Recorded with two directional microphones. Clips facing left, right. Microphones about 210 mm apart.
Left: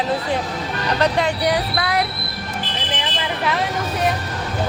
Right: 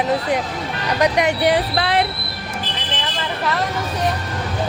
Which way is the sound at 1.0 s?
15° right (ahead or behind).